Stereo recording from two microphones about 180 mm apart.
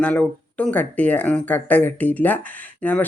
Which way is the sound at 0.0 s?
5° left (ahead or behind).